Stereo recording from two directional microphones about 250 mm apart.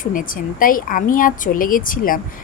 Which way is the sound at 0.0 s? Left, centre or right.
Left.